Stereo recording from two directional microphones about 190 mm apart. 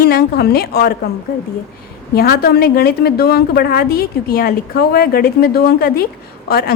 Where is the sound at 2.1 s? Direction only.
55° left (ahead or behind).